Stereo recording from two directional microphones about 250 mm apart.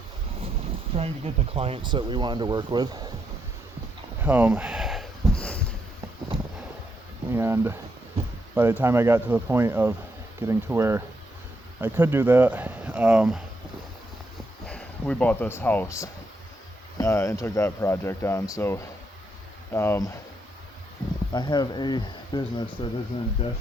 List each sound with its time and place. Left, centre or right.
0.9 s speech: right
4.2 s a sound: centre
7.3 s speech: centre
14.7 s speech: centre
21.3 s speech: centre